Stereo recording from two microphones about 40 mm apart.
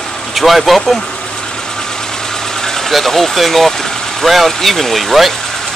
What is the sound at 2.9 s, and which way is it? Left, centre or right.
Speech, centre.